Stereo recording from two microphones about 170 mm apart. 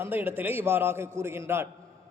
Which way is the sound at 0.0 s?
10° right (ahead or behind).